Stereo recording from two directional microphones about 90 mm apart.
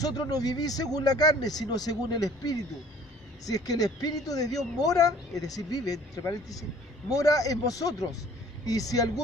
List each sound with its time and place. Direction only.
0.0 s speech: 45° left (ahead or behind)